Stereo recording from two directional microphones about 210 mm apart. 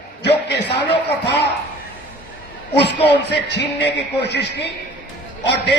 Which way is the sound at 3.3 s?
55° left (ahead or behind).